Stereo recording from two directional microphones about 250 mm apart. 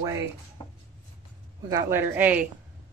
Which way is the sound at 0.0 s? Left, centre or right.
Centre.